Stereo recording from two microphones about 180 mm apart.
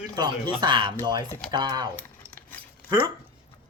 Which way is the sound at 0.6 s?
25° right (ahead or behind).